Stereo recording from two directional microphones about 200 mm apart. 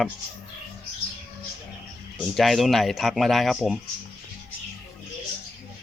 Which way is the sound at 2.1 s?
Centre (ahead or behind).